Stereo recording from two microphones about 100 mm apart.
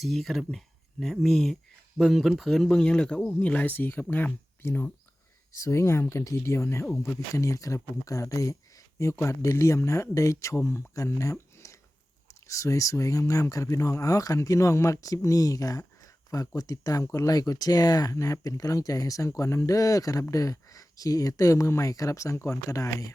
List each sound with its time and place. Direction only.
0.0 s speech: centre (ahead or behind); by 23.1 s 35° left (ahead or behind)